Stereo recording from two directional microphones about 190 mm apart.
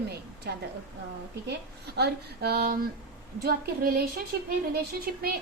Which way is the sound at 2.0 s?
55° right (ahead or behind).